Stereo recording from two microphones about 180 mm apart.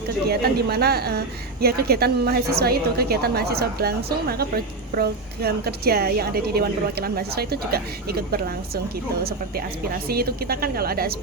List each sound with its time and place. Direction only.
0.3 s a woman's voice: 60° right (ahead or behind)